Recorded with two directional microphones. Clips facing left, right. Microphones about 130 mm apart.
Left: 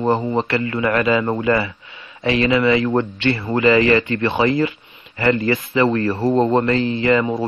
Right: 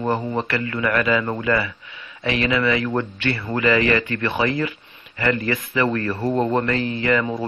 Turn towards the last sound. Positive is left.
turn(degrees=30)  # may be behind; listen again after turning